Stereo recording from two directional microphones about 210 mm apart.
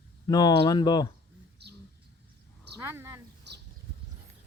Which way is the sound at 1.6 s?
50° right (ahead or behind).